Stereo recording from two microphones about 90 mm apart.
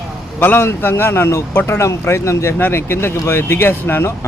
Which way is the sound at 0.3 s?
25° left (ahead or behind).